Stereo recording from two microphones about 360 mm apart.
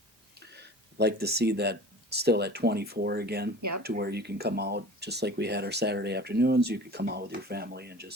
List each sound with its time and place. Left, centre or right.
0.3 s speech: right
3.6 s speech: right
3.8 s speech: right